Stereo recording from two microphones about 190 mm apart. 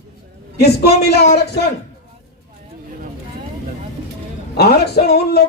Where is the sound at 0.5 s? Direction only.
60° left (ahead or behind).